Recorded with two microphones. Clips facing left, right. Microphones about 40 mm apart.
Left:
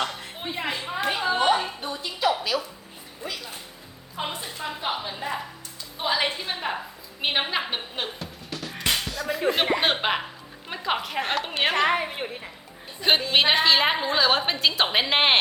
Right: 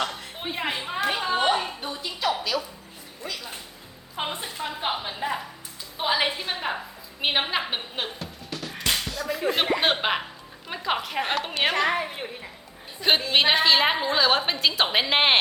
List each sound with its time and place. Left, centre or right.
0.0 s a woman's voice: centre; by 1.0 s right
1.0 s a woman's voice: centre
1.4 s a sound: centre
1.8 s a woman's voice: centre
4.2 s a woman's voice: right
6.0 s a woman's voice: centre
8.9 s music: centre
9.7 s a woman's voice: centre
11.7 s a woman's voice: left
13.0 s a woman's voice: centre